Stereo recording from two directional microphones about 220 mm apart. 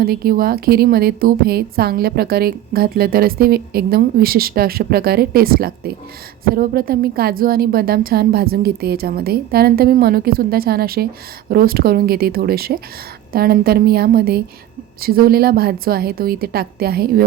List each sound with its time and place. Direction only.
0.0 s a woman's voice: 40° right (ahead or behind)